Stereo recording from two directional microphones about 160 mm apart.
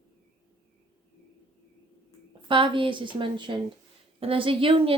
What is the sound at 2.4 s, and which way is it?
A woman's voice, 30° right (ahead or behind).